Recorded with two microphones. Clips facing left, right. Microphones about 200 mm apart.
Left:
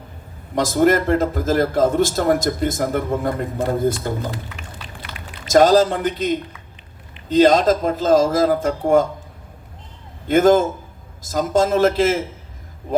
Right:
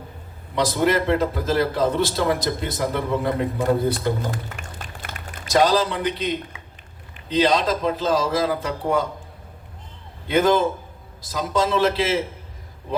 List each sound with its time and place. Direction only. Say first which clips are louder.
0.5 s a man's voice: left 4 dB; 45° left (ahead or behind)
4.2 s music: left 1 dB; 45° right (ahead or behind)
5.5 s a man's voice: left 6 dB; 45° left (ahead or behind)
10.2 s a man's voice: left 4 dB; 45° left (ahead or behind)